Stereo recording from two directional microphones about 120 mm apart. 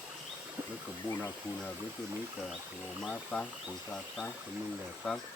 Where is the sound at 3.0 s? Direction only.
5° left (ahead or behind).